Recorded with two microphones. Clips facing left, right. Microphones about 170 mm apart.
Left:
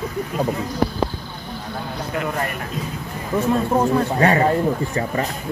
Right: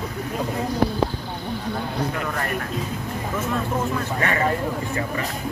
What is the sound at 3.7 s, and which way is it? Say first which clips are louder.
Speech: left 7 dB; 35° left (ahead or behind).